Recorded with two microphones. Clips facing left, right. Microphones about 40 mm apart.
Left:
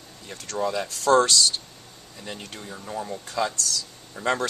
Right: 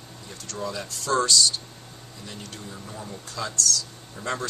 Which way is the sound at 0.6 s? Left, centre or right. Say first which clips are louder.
Left 6 dB; left.